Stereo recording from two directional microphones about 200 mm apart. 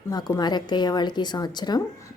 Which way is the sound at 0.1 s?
20° left (ahead or behind).